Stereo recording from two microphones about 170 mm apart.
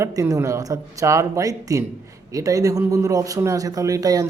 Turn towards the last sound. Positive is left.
turn(degrees=-20)  # may be behind; listen again after turning